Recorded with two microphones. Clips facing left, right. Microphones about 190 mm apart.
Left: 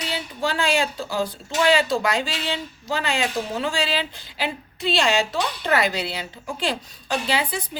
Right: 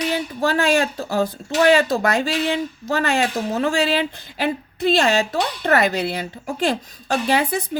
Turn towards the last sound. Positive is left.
turn(degrees=-50)  # may be behind; listen again after turning